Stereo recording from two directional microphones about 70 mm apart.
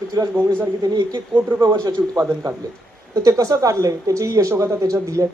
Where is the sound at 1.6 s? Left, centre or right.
Right.